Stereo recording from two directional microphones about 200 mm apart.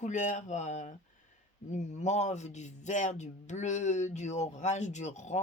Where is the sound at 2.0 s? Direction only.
35° left (ahead or behind).